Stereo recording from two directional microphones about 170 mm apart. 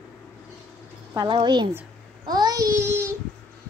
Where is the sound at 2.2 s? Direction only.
25° right (ahead or behind).